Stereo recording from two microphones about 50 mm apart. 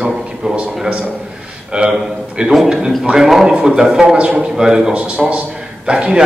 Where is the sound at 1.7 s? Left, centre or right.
Centre.